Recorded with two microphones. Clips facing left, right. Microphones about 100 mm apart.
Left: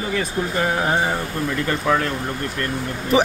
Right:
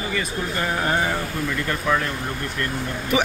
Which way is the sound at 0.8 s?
15° left (ahead or behind).